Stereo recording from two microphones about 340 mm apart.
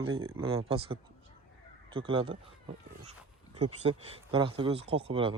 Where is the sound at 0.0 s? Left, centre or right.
Right.